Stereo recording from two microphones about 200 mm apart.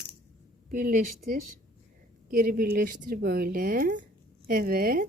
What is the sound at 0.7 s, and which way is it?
Speech, 45° right (ahead or behind).